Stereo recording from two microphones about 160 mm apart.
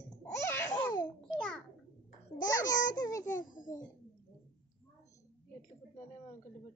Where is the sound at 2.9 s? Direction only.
25° left (ahead or behind).